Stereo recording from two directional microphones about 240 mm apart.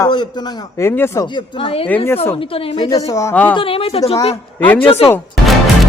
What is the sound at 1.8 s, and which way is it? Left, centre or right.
Speech, centre.